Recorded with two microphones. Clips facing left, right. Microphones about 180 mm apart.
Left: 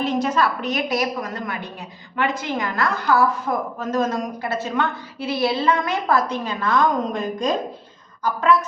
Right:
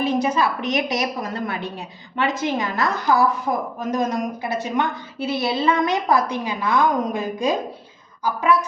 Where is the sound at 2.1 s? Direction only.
20° right (ahead or behind).